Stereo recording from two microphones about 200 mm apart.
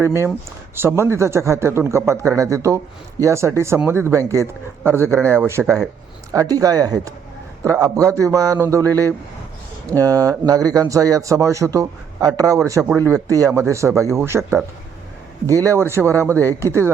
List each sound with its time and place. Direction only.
0.8 s a man's voice: 10° right (ahead or behind)
16.3 s speech: 10° left (ahead or behind)